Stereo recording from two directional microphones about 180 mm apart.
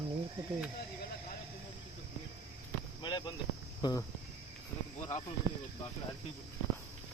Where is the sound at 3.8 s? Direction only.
25° left (ahead or behind).